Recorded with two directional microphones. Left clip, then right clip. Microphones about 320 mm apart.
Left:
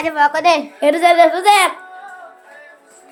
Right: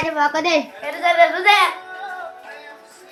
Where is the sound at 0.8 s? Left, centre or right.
Left.